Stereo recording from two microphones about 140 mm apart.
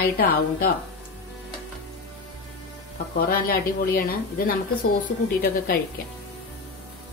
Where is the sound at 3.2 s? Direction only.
90° left.